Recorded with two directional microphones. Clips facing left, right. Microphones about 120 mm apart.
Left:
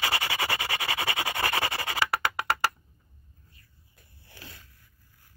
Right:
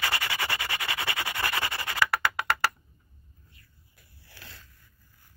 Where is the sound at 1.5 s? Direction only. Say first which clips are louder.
Left 2 dB; 35° left (ahead or behind).